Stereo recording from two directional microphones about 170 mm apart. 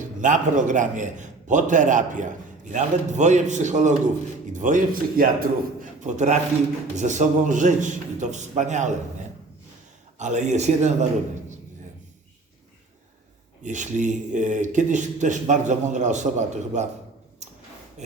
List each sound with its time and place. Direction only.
0.2 s a man's voice: 45° right (ahead or behind)
6.0 s a man's voice: 45° right (ahead or behind)
10.2 s a man's voice: 45° right (ahead or behind)
13.6 s a man's voice: 45° right (ahead or behind)